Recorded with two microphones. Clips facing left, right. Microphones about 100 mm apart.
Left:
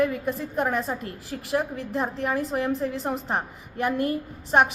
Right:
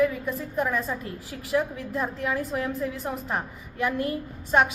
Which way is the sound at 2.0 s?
30° left (ahead or behind).